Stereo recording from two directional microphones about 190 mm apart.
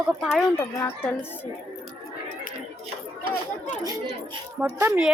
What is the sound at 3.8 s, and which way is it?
A child's voice, 20° right (ahead or behind).